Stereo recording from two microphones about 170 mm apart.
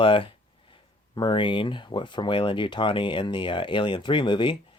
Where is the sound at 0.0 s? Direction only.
30° left (ahead or behind).